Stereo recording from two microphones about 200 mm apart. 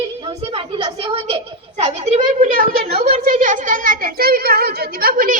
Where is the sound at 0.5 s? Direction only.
25° right (ahead or behind).